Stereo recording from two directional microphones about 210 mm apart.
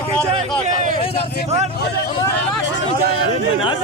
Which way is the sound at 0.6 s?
35° right (ahead or behind).